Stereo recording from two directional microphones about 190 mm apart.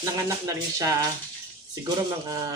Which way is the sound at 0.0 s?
15° right (ahead or behind).